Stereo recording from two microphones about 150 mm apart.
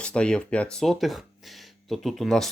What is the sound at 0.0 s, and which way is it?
Speech, 5° left (ahead or behind).